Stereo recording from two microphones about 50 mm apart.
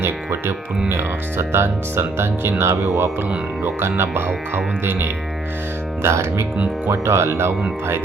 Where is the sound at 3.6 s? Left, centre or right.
Right.